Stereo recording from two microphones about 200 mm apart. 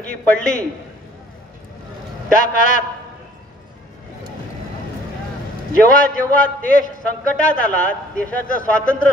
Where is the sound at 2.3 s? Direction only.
40° left (ahead or behind).